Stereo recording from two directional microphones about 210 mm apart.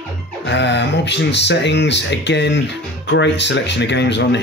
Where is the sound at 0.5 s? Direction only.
55° left (ahead or behind).